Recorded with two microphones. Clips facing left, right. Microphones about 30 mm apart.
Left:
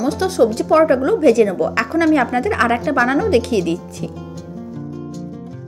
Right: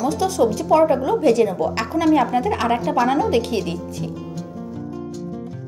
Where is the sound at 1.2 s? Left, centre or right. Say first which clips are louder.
Left 3 dB; left.